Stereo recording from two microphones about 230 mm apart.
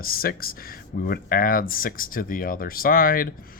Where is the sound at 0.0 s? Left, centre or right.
Left.